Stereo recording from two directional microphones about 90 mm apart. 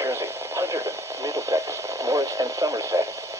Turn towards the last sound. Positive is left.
turn(degrees=-35)  # may be behind; listen again after turning